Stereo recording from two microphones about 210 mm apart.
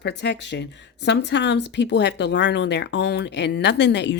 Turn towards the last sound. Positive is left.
turn(degrees=55)  # may be behind; listen again after turning